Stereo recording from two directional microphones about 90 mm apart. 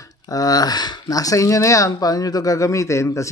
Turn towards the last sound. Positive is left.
turn(degrees=35)  # may be behind; listen again after turning